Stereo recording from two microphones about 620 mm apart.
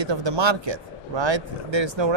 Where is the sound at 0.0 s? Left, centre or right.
Right.